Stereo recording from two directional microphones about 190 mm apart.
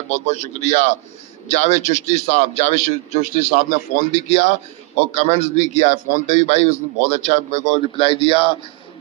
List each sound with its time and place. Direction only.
0.1 s a man's voice: 35° left (ahead or behind)